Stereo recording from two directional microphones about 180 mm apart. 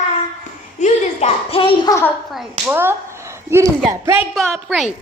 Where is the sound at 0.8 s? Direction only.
40° left (ahead or behind).